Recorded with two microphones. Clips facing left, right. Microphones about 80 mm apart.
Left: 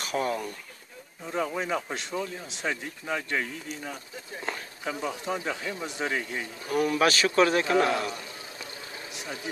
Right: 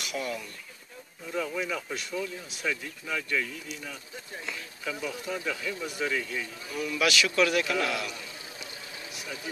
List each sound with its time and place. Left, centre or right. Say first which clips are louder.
0.0 s a sound: left 5 dB; left
1.3 s speech: left 3 dB; left
6.7 s speech: left 5 dB; left
9.1 s vehicle: left 2 dB; left